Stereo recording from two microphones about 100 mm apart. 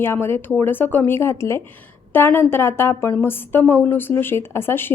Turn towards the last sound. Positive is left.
turn(degrees=20)  # may be behind; listen again after turning